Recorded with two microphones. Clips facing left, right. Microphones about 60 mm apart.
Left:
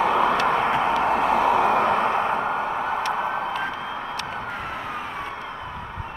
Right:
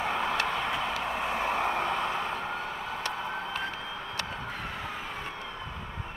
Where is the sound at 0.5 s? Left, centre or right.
Left.